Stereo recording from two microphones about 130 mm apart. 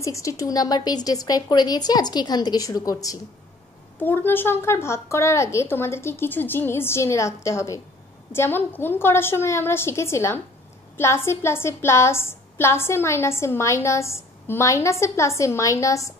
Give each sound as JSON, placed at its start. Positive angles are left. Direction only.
{"t": 0.0, "sound": "a woman's voice", "side_deg": 25}
{"t": 4.0, "sound": "a woman's voice", "side_deg": 15}